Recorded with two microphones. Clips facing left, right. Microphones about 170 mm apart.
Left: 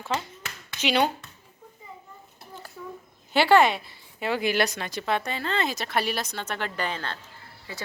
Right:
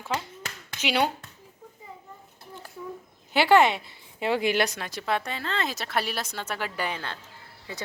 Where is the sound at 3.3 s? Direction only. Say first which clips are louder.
Even; 15° right (ahead or behind).